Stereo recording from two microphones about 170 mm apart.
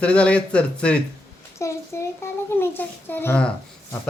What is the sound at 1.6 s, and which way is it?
A child's voice, 20° left (ahead or behind).